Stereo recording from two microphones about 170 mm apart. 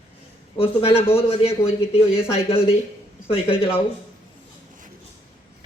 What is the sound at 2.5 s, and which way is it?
A man's voice, 35° left (ahead or behind).